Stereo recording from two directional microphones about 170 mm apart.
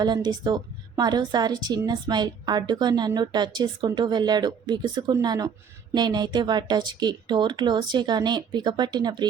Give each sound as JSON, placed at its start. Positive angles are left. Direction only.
{"t": 0.0, "sound": "speech", "side_deg": -25}